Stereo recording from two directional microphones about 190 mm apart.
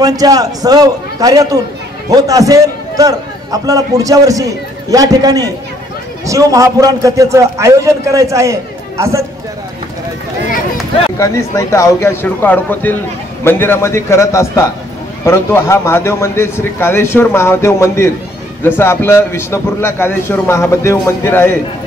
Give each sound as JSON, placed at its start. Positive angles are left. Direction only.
{"t": 0.0, "sound": "a man's voice", "side_deg": -20}
{"t": 11.1, "sound": "a man's voice", "side_deg": 15}